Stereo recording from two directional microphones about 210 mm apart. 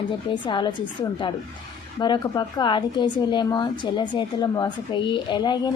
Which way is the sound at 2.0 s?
20° left (ahead or behind).